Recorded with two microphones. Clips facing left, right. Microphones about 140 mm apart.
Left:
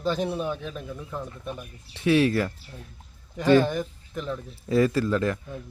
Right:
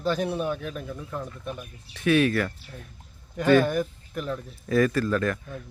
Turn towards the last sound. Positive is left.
turn(degrees=25)  # may be behind; listen again after turning